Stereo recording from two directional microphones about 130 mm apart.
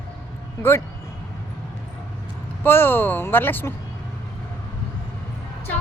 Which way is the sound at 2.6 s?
15° left (ahead or behind).